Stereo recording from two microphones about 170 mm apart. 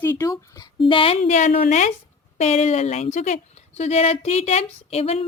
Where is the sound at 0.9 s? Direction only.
35° left (ahead or behind).